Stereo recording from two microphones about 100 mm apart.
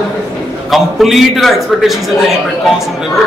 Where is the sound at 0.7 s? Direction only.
Centre (ahead or behind).